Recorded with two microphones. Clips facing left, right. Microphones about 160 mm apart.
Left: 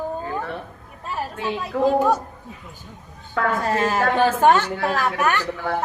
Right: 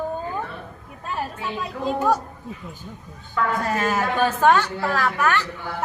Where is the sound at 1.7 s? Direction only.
65° left (ahead or behind).